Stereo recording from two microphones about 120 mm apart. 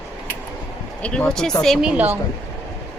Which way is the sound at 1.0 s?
10° left (ahead or behind).